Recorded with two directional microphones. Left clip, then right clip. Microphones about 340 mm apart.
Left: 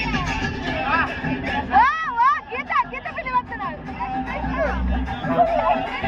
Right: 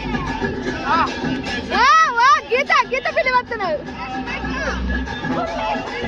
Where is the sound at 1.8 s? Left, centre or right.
Centre.